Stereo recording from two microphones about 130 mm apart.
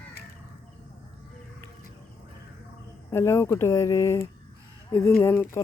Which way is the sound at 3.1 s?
20° left (ahead or behind).